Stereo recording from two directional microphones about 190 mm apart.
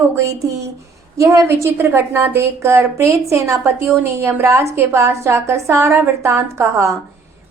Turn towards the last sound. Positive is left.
turn(degrees=-15)  # may be behind; listen again after turning